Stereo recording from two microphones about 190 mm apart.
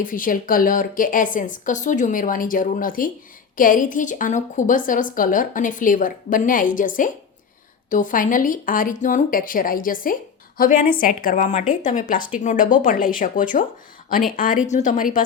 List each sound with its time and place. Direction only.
0.0 s a woman's voice: 45° left (ahead or behind)